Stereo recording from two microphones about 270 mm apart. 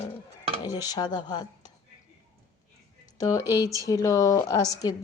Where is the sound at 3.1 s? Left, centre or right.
Centre.